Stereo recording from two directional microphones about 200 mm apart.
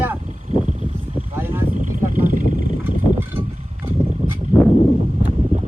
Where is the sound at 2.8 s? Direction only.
10° right (ahead or behind).